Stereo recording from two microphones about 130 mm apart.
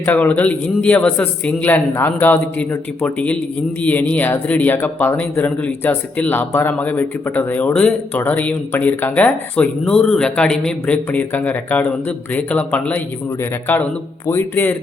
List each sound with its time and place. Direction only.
0.0 s speech: 15° left (ahead or behind)